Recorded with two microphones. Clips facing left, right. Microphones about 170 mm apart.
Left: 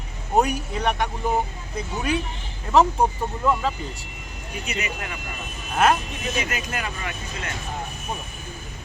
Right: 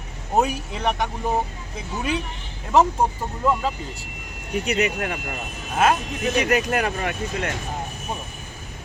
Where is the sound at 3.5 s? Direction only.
Centre (ahead or behind).